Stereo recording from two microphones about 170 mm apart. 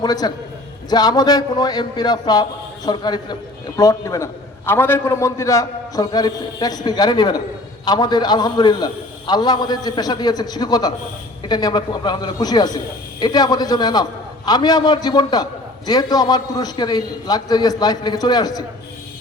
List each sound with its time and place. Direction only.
0.0 s a man's voice: 25° left (ahead or behind)